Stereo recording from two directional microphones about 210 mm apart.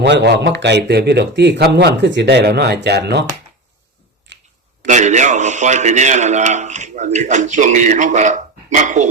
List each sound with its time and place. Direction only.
0.0 s speech: 55° right (ahead or behind)
4.3 s a sound: 60° right (ahead or behind)
4.9 s a man's voice: 35° right (ahead or behind)